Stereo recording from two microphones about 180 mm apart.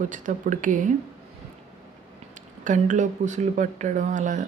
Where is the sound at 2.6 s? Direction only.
45° right (ahead or behind).